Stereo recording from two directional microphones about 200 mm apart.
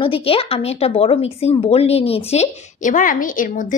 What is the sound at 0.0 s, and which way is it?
Speech, 30° left (ahead or behind).